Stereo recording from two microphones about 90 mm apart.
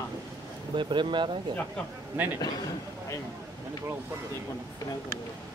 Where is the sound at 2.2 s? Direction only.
20° right (ahead or behind).